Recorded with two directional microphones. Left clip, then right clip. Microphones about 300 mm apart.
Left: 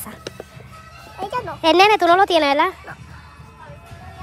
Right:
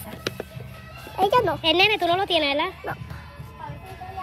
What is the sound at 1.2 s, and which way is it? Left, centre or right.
Speech, right.